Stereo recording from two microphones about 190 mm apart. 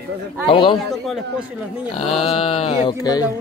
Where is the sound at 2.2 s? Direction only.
30° left (ahead or behind).